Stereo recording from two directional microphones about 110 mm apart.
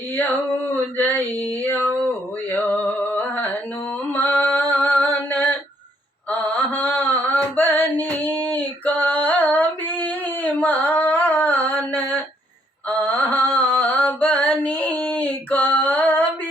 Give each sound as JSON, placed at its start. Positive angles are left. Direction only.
{"t": 0.9, "sound": "female singing", "side_deg": 15}
{"t": 2.6, "sound": "a sound", "side_deg": 10}
{"t": 4.1, "sound": "female singing", "side_deg": 15}
{"t": 6.4, "sound": "mantra", "side_deg": 15}